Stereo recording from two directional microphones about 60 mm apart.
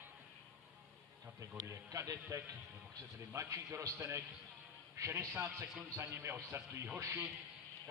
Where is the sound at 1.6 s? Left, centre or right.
Right.